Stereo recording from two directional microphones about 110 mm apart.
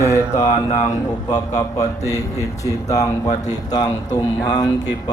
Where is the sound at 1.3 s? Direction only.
35° left (ahead or behind).